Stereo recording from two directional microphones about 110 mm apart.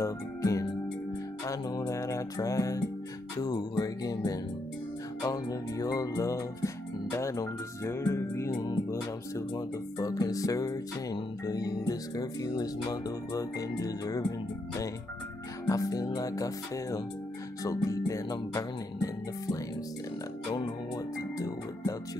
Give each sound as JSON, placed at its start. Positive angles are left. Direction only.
{"t": 0.0, "sound": "music", "side_deg": 30}
{"t": 3.3, "sound": "speech", "side_deg": 35}
{"t": 5.2, "sound": "music", "side_deg": 30}
{"t": 9.5, "sound": "speech", "side_deg": 30}
{"t": 15.6, "sound": "speech", "side_deg": 30}
{"t": 20.5, "sound": "music", "side_deg": 35}